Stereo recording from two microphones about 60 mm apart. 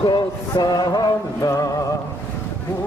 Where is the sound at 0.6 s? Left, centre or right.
Left.